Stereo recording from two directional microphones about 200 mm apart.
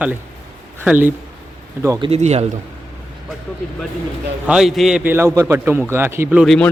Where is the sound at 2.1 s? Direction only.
30° right (ahead or behind).